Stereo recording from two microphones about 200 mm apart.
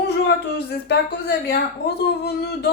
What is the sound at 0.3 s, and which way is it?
Speech, 55° left (ahead or behind).